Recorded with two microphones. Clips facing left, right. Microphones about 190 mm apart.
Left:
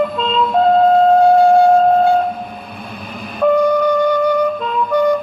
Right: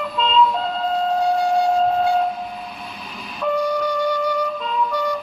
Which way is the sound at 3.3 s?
55° left (ahead or behind).